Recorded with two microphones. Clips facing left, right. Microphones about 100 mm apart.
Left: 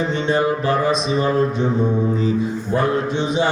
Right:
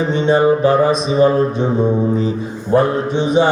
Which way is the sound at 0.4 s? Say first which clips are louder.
Right 6 dB; 20° right (ahead or behind).